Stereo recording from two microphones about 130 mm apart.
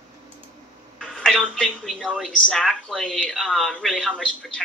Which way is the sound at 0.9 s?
5° left (ahead or behind).